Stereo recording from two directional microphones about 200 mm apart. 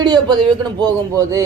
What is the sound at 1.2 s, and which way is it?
Speech, 15° right (ahead or behind).